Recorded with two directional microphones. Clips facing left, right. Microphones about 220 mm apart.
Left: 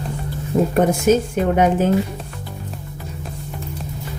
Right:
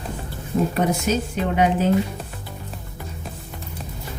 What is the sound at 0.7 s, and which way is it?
A woman's voice, 50° left (ahead or behind).